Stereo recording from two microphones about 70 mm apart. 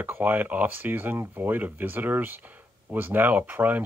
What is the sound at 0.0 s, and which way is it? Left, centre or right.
Speech, right.